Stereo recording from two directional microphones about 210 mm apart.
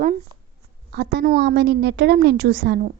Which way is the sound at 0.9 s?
50° right (ahead or behind).